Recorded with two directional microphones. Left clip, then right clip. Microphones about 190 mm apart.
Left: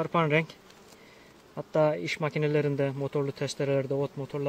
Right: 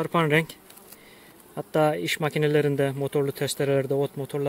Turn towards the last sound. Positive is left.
turn(degrees=-40)  # may be behind; listen again after turning